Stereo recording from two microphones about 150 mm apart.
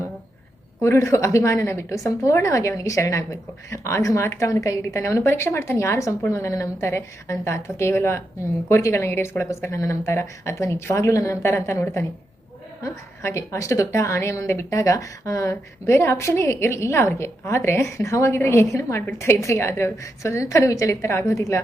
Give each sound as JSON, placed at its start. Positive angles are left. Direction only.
{"t": 0.8, "sound": "a woman's voice", "side_deg": 15}